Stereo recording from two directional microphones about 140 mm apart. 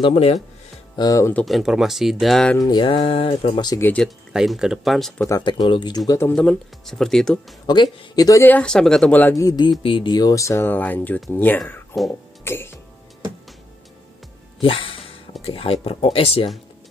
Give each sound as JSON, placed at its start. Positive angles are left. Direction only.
{"t": 0.0, "sound": "speech", "side_deg": 45}
{"t": 0.9, "sound": "speech", "side_deg": 25}
{"t": 1.3, "sound": "speech", "side_deg": 0}
{"t": 2.5, "sound": "speech", "side_deg": 30}
{"t": 3.8, "sound": "speech", "side_deg": 10}
{"t": 4.3, "sound": "speech", "side_deg": -5}
{"t": 5.4, "sound": "speech", "side_deg": 35}
{"t": 6.3, "sound": "speech", "side_deg": 5}
{"t": 7.6, "sound": "speech", "side_deg": 30}
{"t": 8.4, "sound": "speech", "side_deg": 10}
{"t": 9.3, "sound": "speech", "side_deg": 25}
{"t": 14.6, "sound": "a sound", "side_deg": 40}
{"t": 15.4, "sound": "speech", "side_deg": 45}